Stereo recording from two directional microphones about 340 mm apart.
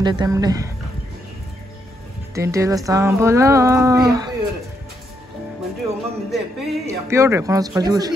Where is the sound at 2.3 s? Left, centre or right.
Centre.